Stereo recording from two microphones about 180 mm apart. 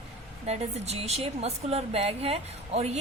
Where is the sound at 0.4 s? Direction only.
35° right (ahead or behind).